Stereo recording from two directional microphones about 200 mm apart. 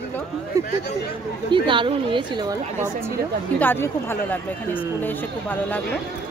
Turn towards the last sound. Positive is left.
turn(degrees=10)  # may be behind; listen again after turning